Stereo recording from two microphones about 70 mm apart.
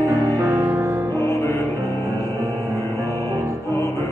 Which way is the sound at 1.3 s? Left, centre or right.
Left.